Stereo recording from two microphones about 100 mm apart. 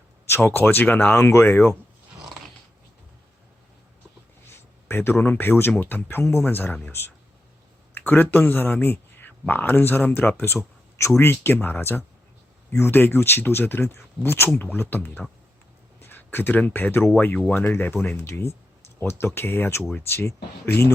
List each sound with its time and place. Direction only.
0.3 s speech: 20° left (ahead or behind)
4.4 s a man's voice: 25° left (ahead or behind)